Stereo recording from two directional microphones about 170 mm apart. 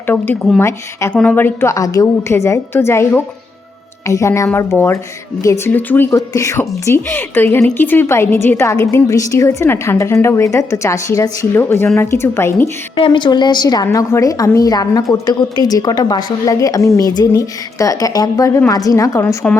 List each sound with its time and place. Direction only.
0.1 s a woman's voice: 10° left (ahead or behind)
13.0 s a woman's voice: 30° left (ahead or behind)